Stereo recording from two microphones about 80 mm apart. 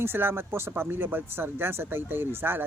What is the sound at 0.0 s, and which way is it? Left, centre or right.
Speech, right.